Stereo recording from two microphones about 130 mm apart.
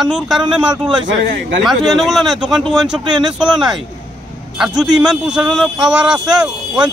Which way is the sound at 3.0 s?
35° right (ahead or behind).